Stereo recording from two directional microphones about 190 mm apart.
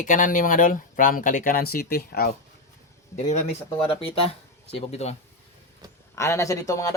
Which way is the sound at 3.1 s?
40° left (ahead or behind).